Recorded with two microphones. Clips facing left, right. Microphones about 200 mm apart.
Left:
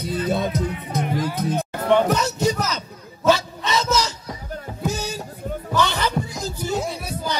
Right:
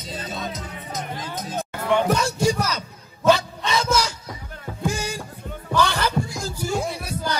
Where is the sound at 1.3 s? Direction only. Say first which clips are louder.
Left 6 dB; 60° left (ahead or behind).